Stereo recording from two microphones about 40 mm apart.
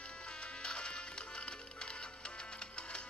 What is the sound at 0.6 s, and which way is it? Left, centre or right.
Music, left.